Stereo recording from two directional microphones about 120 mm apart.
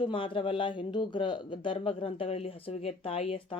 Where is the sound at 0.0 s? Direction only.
45° left (ahead or behind).